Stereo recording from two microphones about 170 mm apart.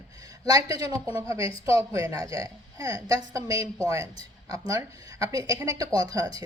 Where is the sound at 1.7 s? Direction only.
20° right (ahead or behind).